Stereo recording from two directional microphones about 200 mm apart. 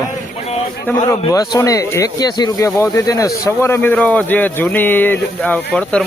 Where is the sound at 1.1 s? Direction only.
15° left (ahead or behind).